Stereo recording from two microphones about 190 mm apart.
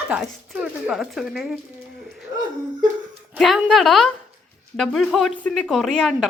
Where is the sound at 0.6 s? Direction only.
Centre (ahead or behind).